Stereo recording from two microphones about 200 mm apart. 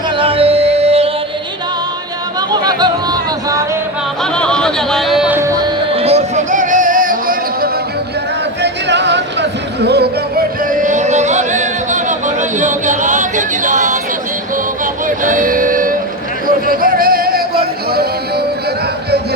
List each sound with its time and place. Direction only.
0.2 s music: 30° right (ahead or behind)
2.5 s yodeling: 20° right (ahead or behind)
4.2 s music: 5° left (ahead or behind)
6.0 s music: 30° right (ahead or behind)
8.6 s music: 60° right (ahead or behind); by 14.0 s 40° right (ahead or behind)
15.0 s a sound: 40° right (ahead or behind)
17.9 s music: 50° right (ahead or behind)